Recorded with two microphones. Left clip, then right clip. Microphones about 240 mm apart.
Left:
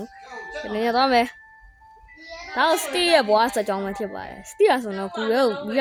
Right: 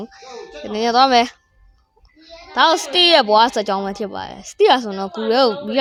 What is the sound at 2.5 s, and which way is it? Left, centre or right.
A woman's voice, centre.